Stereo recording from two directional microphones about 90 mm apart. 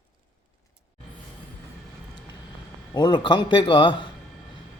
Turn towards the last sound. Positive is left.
turn(degrees=65)  # may be behind; listen again after turning